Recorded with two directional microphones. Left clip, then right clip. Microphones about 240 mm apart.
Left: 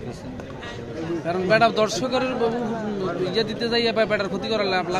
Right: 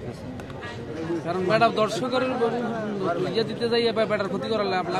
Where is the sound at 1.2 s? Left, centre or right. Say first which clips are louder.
Left 3 dB; left.